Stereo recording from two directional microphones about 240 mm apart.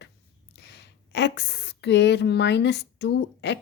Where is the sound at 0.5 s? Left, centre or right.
Left.